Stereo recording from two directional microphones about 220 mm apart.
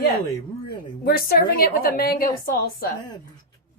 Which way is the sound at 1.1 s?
45° left (ahead or behind).